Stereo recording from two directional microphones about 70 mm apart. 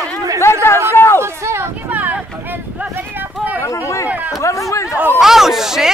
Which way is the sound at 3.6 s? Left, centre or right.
Left.